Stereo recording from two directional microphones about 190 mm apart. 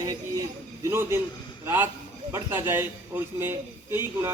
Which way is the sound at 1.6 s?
10° right (ahead or behind).